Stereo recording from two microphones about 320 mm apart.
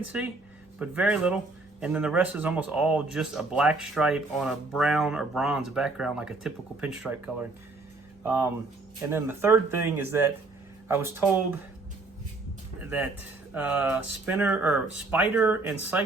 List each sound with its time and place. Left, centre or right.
0.0 s speech: centre
8.2 s speech: centre
12.8 s speech: centre